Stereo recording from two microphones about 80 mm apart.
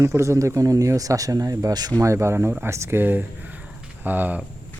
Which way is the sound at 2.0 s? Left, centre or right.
Right.